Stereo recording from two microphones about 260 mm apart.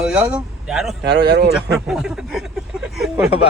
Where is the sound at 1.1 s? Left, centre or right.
Right.